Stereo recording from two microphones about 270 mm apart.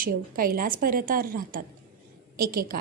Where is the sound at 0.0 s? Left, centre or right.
Right.